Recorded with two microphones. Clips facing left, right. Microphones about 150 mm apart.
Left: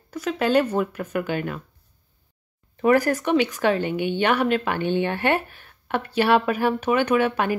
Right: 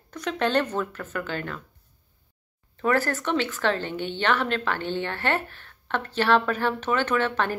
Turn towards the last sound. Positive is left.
turn(degrees=10)  # may be behind; listen again after turning